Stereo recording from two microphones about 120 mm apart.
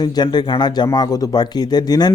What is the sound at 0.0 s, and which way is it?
A man's voice, 35° left (ahead or behind).